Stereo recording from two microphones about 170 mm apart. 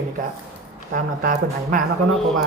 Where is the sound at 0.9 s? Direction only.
55° right (ahead or behind).